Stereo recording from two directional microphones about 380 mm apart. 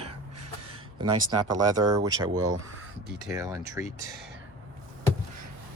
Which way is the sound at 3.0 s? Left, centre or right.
Centre.